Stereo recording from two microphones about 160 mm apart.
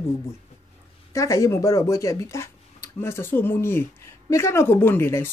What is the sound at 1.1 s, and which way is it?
Speech, 20° left (ahead or behind).